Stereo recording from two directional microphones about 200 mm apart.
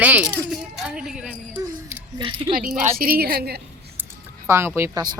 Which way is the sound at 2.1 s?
25° right (ahead or behind).